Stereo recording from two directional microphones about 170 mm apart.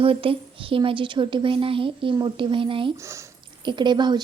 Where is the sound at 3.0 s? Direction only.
15° right (ahead or behind).